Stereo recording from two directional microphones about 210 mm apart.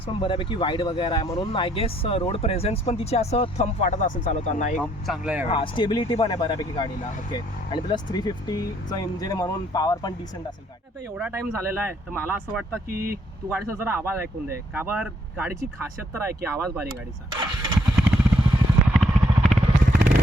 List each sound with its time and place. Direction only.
0.0 s speech: 25° left (ahead or behind)
4.8 s speech: centre (ahead or behind)
5.5 s speech: 25° left (ahead or behind)
11.2 s speech: 10° right (ahead or behind)
12.9 s speech: 45° right (ahead or behind)
13.5 s speech: 10° right (ahead or behind)
17.3 s vehicle: 20° right (ahead or behind)
17.9 s vehicle: 5° right (ahead or behind)
19.5 s vehicle: 40° right (ahead or behind)